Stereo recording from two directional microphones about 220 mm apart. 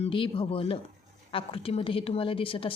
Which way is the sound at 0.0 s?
25° left (ahead or behind).